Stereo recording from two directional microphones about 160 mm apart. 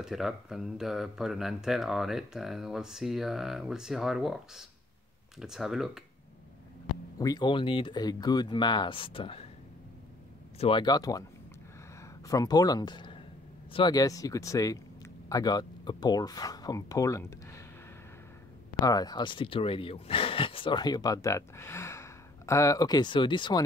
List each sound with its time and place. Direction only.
0.0 s speech: centre (ahead or behind)
7.2 s speech: 25° left (ahead or behind)
10.6 s speech: 30° left (ahead or behind)
12.3 s speech: 25° left (ahead or behind)
18.8 s speech: 25° left (ahead or behind)